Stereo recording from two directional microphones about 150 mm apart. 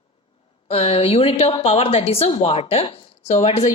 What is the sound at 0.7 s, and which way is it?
Speech, 40° left (ahead or behind).